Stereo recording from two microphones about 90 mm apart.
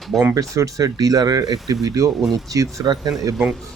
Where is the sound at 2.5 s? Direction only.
50° right (ahead or behind).